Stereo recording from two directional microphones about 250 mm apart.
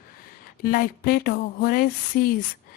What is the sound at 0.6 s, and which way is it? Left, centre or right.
Speech, left.